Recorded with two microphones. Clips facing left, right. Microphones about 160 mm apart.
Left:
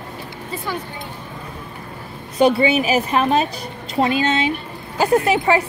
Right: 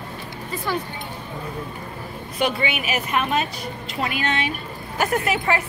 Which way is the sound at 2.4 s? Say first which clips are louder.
Left 9 dB; 30° left (ahead or behind).